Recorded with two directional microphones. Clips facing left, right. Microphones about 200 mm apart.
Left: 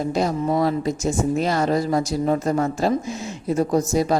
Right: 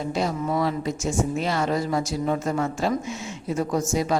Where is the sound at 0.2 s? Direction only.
40° left (ahead or behind).